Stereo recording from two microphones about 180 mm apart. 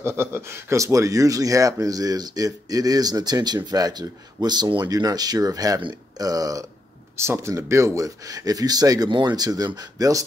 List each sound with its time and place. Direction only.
0.0 s speech: 15° right (ahead or behind)